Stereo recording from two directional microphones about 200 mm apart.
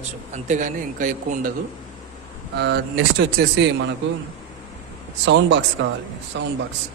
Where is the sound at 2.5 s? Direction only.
55° right (ahead or behind).